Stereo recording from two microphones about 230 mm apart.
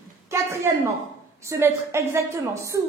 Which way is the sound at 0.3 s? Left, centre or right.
Centre.